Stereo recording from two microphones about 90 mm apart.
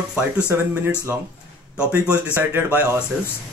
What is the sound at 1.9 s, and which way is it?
Speech, 20° right (ahead or behind).